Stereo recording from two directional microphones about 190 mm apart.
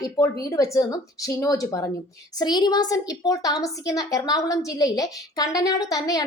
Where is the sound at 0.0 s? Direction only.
15° left (ahead or behind).